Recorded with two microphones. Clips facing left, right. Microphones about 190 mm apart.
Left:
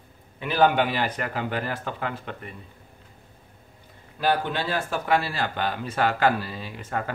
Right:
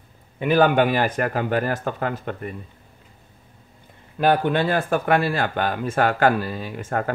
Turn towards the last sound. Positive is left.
turn(degrees=-50)  # may be behind; listen again after turning